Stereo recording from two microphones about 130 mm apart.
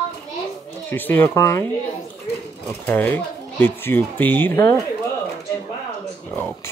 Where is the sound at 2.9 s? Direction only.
15° left (ahead or behind).